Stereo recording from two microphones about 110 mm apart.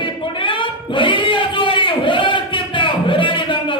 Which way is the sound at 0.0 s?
50° left (ahead or behind).